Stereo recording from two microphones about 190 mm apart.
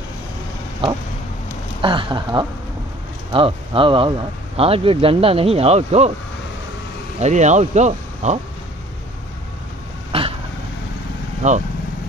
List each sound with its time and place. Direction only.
1.8 s speech: 25° right (ahead or behind)
7.2 s speech: 40° right (ahead or behind)
10.1 s vehicle: 30° right (ahead or behind)
11.4 s speech: 40° right (ahead or behind)